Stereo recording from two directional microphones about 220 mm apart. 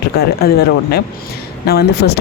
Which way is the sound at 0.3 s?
45° left (ahead or behind).